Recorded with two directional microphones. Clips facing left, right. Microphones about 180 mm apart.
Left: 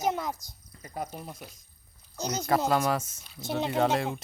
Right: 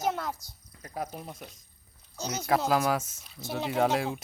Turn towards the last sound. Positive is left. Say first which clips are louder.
# even
turn(degrees=0)  # may be behind; listen again after turning